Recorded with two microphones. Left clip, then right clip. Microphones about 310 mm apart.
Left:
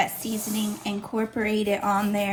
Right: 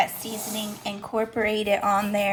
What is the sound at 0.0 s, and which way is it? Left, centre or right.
A woman's voice, centre.